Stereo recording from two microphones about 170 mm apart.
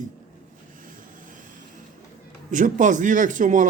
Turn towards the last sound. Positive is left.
turn(degrees=-50)  # may be behind; listen again after turning